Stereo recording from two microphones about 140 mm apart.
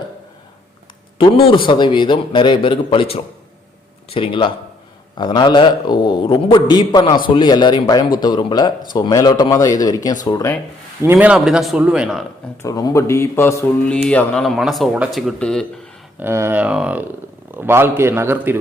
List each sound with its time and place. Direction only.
1.2 s a man's voice: 40° left (ahead or behind)
11.0 s a man's voice: 15° right (ahead or behind)
11.3 s speech: centre (ahead or behind)
12.6 s speech: 25° left (ahead or behind)
13.8 s speech: 10° left (ahead or behind)
16.2 s a man's voice: 15° right (ahead or behind)